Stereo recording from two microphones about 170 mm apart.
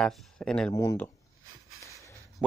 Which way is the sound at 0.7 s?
15° left (ahead or behind).